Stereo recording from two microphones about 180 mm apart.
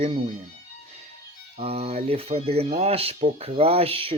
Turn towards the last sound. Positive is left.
turn(degrees=-30)  # may be behind; listen again after turning